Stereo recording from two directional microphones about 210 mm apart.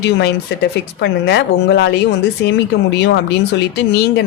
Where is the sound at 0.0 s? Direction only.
55° left (ahead or behind).